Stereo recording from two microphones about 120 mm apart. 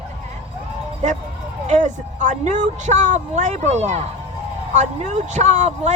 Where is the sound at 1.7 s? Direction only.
80° right.